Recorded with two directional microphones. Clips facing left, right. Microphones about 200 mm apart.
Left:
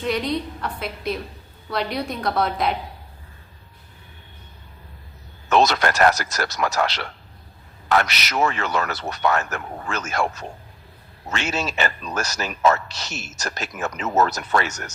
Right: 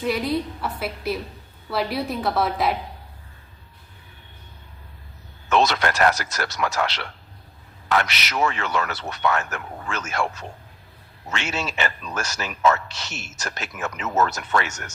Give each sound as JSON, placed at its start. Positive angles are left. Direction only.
{"t": 0.0, "sound": "a woman's voice", "side_deg": -5}
{"t": 5.5, "sound": "a man's voice", "side_deg": 40}